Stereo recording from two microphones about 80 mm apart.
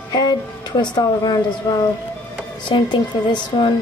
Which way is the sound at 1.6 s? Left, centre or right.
Left.